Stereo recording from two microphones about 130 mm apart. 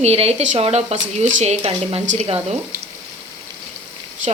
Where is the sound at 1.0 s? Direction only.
65° right (ahead or behind).